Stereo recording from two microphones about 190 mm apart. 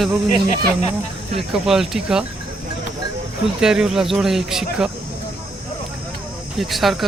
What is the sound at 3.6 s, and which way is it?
Speech, 5° right (ahead or behind).